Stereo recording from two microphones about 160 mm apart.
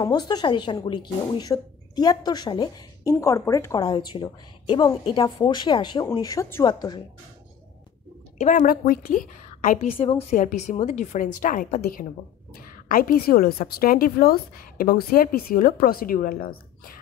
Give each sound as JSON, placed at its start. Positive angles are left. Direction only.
{"t": 0.0, "sound": "speech", "side_deg": 25}
{"t": 4.1, "sound": "speech", "side_deg": 30}
{"t": 8.4, "sound": "a woman's voice", "side_deg": 50}
{"t": 9.8, "sound": "a woman's voice", "side_deg": 35}
{"t": 10.3, "sound": "a woman's voice", "side_deg": 55}